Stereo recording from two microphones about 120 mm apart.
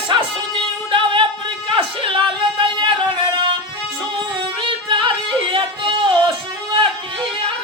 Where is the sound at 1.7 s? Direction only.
45° right (ahead or behind).